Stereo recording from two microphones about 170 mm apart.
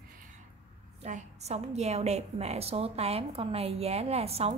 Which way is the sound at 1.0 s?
40° right (ahead or behind).